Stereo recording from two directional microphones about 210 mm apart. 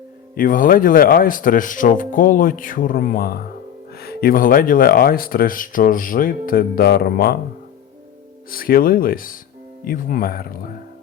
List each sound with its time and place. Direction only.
0.3 s speech: 40° left (ahead or behind)
8.4 s speech: 45° left (ahead or behind)